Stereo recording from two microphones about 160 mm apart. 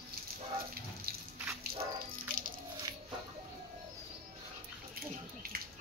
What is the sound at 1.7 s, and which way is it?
Dog, 70° right (ahead or behind).